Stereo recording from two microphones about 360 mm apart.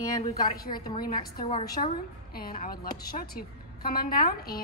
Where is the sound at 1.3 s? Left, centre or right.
Centre.